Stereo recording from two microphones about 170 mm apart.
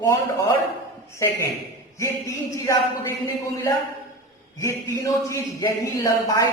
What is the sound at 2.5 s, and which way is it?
Speech, 15° left (ahead or behind).